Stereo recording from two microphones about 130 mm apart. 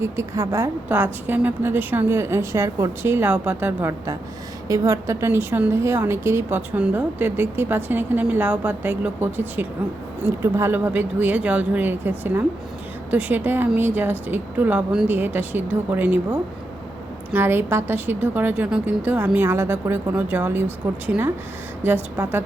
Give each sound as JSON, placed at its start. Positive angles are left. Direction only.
{"t": 0.0, "sound": "a woman's voice", "side_deg": -20}